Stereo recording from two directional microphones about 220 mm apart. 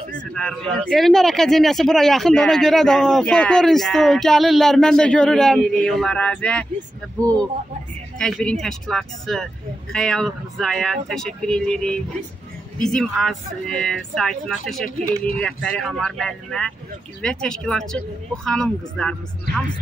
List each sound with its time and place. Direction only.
0.1 s a man's voice: 5° left (ahead or behind)
7.2 s speech: 15° right (ahead or behind)
8.2 s a man's voice: 5° left (ahead or behind)